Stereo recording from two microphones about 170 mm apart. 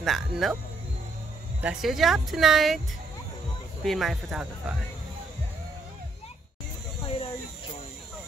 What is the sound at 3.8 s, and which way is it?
Speech, centre (ahead or behind).